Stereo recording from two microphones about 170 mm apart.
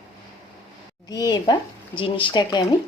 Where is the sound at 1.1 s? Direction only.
25° left (ahead or behind).